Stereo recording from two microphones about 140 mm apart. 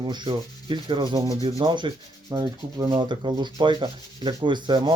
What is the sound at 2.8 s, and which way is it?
Speech, 35° right (ahead or behind).